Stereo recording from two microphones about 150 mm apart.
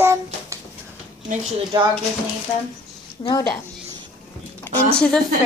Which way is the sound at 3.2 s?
30° left (ahead or behind).